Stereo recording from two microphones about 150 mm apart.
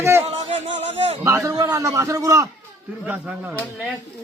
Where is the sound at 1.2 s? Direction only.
20° right (ahead or behind).